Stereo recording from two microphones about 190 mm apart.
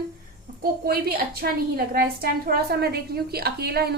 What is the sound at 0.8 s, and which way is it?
A woman's voice, 55° right (ahead or behind).